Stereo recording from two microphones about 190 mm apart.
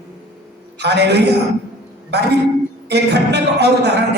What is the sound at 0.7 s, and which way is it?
Speech, 60° right (ahead or behind).